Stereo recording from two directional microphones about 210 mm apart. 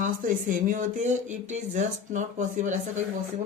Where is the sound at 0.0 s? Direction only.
40° right (ahead or behind).